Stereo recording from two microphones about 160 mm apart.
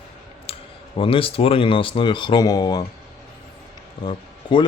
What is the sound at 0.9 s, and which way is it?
Speech, 35° left (ahead or behind).